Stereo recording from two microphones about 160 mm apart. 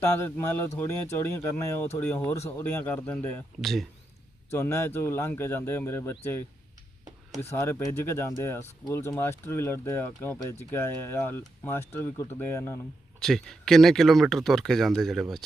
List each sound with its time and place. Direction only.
0.2 s speech: 15° left (ahead or behind)
4.5 s speech: 15° left (ahead or behind)
7.5 s speech: 15° left (ahead or behind)
13.1 s speech: 5° left (ahead or behind)